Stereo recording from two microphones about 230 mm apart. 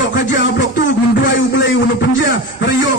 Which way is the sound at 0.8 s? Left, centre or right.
Left.